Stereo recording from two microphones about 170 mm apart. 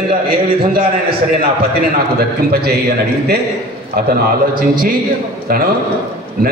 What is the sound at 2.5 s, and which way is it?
Speech, 65° right (ahead or behind).